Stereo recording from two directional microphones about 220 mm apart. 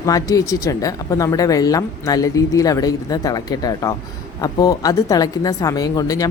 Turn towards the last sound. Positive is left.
turn(degrees=15)  # may be behind; listen again after turning